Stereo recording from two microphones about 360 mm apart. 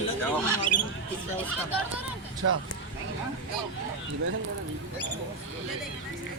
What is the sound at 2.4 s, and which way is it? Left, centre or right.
Speech, right.